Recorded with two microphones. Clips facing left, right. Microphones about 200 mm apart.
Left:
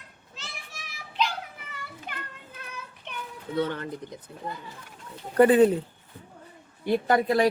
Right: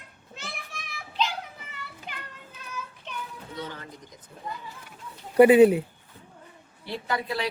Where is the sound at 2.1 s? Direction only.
55° left (ahead or behind).